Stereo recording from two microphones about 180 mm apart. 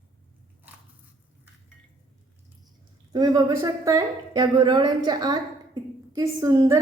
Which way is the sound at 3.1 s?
20° right (ahead or behind).